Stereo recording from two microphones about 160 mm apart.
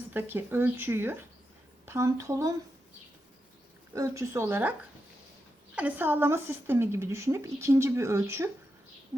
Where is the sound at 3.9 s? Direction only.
20° right (ahead or behind).